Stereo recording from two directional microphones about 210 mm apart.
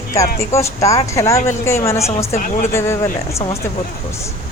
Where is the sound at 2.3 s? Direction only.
35° left (ahead or behind).